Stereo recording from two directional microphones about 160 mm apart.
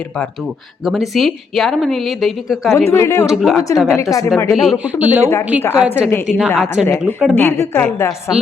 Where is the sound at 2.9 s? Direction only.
15° left (ahead or behind).